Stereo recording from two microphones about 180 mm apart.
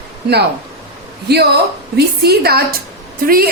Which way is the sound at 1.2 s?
65° right (ahead or behind).